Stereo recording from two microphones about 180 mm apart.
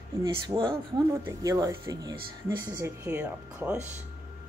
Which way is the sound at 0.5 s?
20° right (ahead or behind).